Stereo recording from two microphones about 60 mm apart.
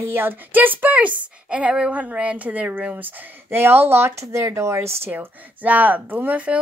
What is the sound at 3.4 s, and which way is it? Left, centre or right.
A woman's voice, right.